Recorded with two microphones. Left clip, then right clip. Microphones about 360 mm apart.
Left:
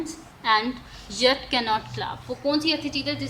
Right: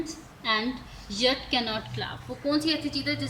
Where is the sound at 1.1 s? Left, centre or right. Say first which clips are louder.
Left 4 dB; centre.